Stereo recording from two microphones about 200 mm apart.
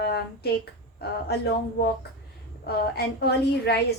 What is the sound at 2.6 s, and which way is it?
A woman's voice, 50° left (ahead or behind).